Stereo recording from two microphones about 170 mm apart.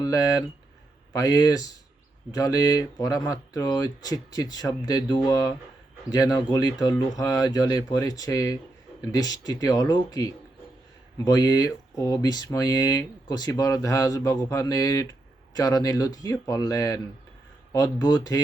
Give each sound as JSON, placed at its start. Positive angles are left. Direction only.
{"t": 0.0, "sound": "speech", "side_deg": 20}